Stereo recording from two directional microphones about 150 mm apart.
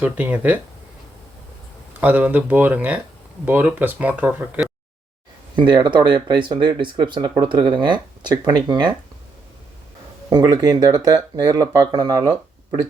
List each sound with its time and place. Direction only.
0.0 s speech: 10° right (ahead or behind)
1.9 s speech: 10° right (ahead or behind)
5.5 s speech: 30° right (ahead or behind)
10.2 s speech: 25° right (ahead or behind)